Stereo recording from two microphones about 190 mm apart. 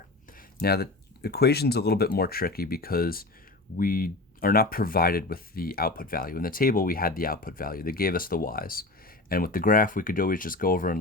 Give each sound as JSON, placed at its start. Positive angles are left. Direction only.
{"t": 0.3, "sound": "speech", "side_deg": 55}